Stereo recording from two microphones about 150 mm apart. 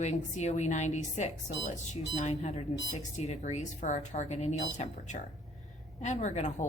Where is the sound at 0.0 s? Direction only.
50° left (ahead or behind).